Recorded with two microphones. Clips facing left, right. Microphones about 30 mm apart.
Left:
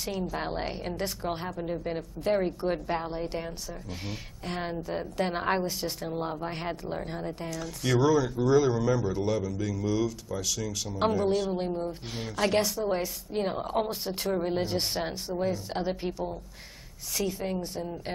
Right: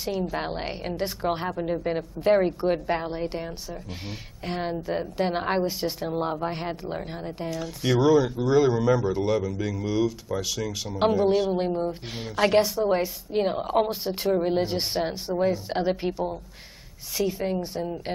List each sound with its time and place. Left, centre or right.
0.3 s speech: centre
4.5 s a woman's voice: centre
6.5 s a woman's voice: centre
6.8 s a woman's voice: centre